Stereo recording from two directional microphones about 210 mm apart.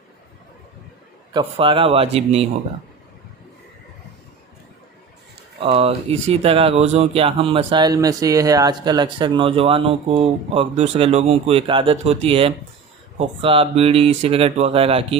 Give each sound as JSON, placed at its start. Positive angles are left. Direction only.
{"t": 1.3, "sound": "speech", "side_deg": -25}
{"t": 5.5, "sound": "speech", "side_deg": -30}